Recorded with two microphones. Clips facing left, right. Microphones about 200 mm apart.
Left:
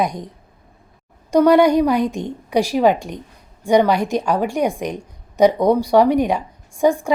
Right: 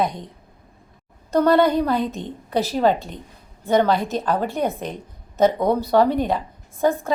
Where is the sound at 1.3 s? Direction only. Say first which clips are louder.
Left 4 dB; 15° left (ahead or behind).